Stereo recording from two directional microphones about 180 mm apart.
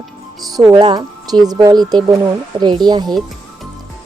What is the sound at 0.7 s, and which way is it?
Speech, 25° right (ahead or behind).